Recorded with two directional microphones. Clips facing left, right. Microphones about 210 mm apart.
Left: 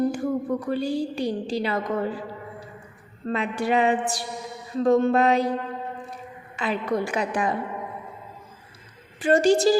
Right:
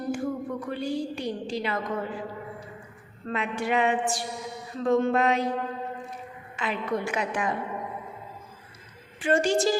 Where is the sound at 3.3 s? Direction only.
35° left (ahead or behind).